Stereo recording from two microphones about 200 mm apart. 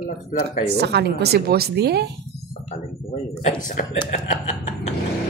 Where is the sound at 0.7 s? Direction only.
55° right (ahead or behind).